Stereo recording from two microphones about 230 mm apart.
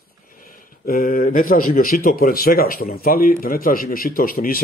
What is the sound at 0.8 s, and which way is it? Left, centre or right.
Speech, left.